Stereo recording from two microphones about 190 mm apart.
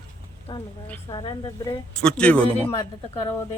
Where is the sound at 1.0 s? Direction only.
25° left (ahead or behind).